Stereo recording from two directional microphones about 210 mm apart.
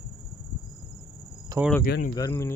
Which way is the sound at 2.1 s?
15° left (ahead or behind).